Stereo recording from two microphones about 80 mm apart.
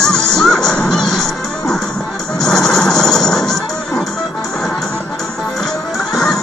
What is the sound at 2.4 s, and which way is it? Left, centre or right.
Music, centre.